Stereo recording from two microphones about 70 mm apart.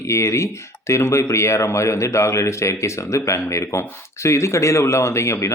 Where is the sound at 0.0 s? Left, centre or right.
Left.